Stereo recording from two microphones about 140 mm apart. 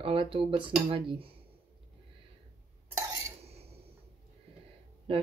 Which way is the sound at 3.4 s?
50° right (ahead or behind).